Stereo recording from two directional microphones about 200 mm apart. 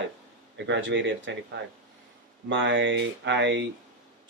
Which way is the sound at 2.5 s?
65° right (ahead or behind).